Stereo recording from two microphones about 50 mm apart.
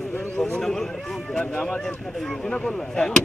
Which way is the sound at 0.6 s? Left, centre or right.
Centre.